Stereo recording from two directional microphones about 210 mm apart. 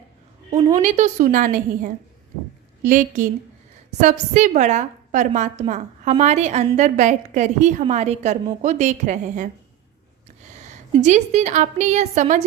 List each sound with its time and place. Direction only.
0.8 s a woman's voice: 35° right (ahead or behind)
10.9 s a woman's voice: 35° right (ahead or behind)